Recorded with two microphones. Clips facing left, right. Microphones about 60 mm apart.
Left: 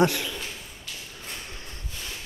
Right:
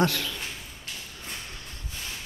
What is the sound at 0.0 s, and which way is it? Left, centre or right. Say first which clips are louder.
Speech: left 3 dB; centre.